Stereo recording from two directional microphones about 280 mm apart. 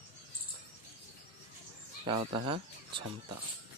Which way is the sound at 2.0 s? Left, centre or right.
Centre.